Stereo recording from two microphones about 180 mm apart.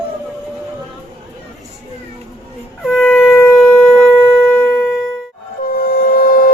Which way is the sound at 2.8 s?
5° left (ahead or behind).